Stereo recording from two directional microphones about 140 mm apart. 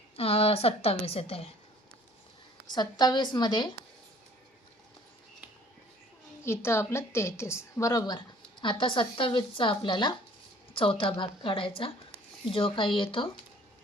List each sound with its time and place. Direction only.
0.2 s a woman's voice: 45° left (ahead or behind)
2.7 s speech: 30° left (ahead or behind)
6.4 s a woman's voice: 20° left (ahead or behind); by 13.3 s 40° left (ahead or behind)